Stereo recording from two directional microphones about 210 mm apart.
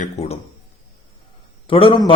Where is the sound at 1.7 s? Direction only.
25° left (ahead or behind).